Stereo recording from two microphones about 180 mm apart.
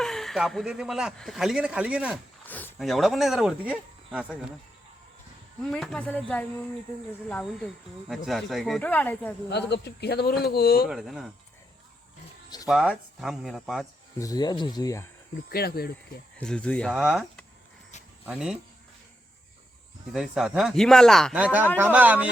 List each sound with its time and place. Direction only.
0.0 s speech: centre (ahead or behind)
2.5 s speech: 10° left (ahead or behind)
5.6 s speech: 5° left (ahead or behind)
9.5 s speech: 70° left (ahead or behind)
10.8 s speech: centre (ahead or behind)
12.6 s speech: centre (ahead or behind)
14.2 s speech: 20° left (ahead or behind)
15.4 s speech: 60° left (ahead or behind)
16.4 s speech: 5° left (ahead or behind)
16.9 s speech: 5° right (ahead or behind)
18.3 s speech: 5° right (ahead or behind)
20.1 s a man's voice: centre (ahead or behind)